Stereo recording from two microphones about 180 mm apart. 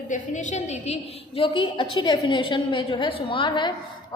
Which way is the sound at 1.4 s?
25° left (ahead or behind).